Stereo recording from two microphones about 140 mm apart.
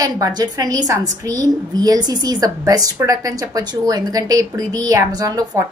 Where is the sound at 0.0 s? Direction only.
25° right (ahead or behind).